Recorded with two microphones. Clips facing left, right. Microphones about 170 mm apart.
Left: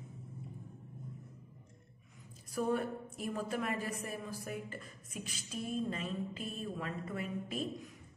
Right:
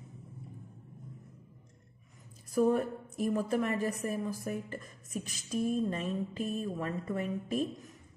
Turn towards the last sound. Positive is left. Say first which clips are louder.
# right 5 dB
turn(degrees=-40)  # may be behind; listen again after turning